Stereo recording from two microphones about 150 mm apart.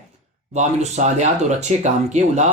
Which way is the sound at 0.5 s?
50° right (ahead or behind).